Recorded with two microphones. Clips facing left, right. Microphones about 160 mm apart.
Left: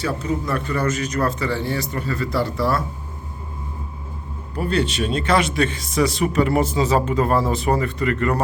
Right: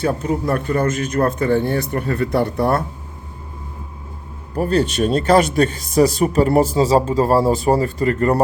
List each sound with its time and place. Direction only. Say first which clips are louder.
0.0 s speech: right 4 dB; 55° right (ahead or behind)
4.5 s speech: right 4 dB; 40° right (ahead or behind)